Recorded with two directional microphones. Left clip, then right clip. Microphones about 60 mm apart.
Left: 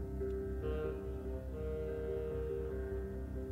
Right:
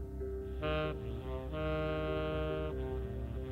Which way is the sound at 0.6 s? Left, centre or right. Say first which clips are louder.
Right 4 dB; centre.